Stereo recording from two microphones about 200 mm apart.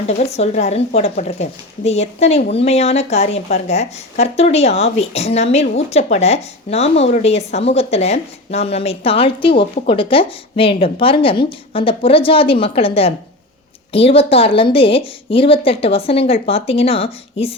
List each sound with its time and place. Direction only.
0.2 s a woman's voice: 30° left (ahead or behind)